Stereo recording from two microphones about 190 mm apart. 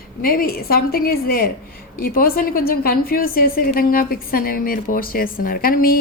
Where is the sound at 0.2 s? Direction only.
50° left (ahead or behind).